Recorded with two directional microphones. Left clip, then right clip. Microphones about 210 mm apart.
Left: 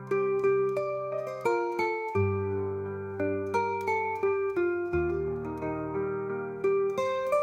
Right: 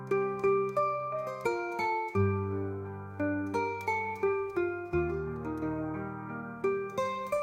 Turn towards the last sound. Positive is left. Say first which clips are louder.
# left 5 dB
turn(degrees=0)  # may be behind; listen again after turning